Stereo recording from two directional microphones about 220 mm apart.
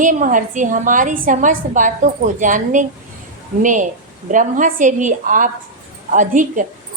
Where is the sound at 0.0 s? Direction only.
35° right (ahead or behind).